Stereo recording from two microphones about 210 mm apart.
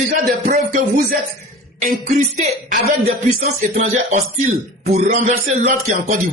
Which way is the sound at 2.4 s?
40° right (ahead or behind).